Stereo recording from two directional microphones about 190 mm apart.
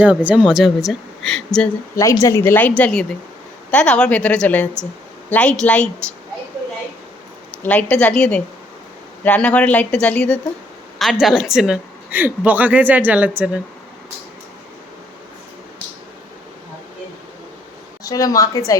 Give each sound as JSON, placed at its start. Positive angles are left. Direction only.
{"t": 0.0, "sound": "a woman's voice", "side_deg": -5}
{"t": 2.2, "sound": "a woman's voice", "side_deg": 15}
{"t": 7.6, "sound": "a woman's voice", "side_deg": 10}
{"t": 18.0, "sound": "a woman's voice", "side_deg": 20}